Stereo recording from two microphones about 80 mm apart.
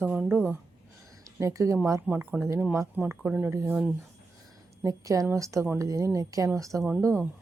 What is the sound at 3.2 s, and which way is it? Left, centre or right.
Speech, right.